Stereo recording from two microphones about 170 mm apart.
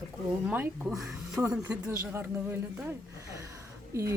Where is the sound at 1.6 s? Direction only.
15° right (ahead or behind).